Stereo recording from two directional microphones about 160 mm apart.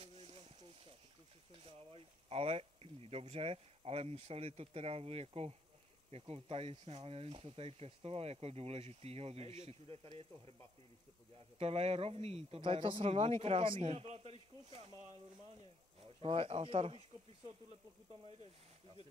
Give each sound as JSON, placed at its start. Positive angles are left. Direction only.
{"t": 0.0, "sound": "a sound", "side_deg": -35}
{"t": 1.6, "sound": "speech", "side_deg": -35}
{"t": 11.5, "sound": "speech", "side_deg": -40}
{"t": 16.2, "sound": "speech", "side_deg": -35}